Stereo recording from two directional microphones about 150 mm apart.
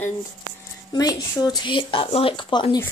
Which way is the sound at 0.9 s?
25° left (ahead or behind).